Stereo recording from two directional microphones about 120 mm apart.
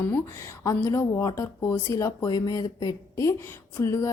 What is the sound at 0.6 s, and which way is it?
Speech, 25° left (ahead or behind).